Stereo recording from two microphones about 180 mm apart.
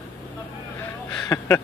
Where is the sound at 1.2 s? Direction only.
15° left (ahead or behind).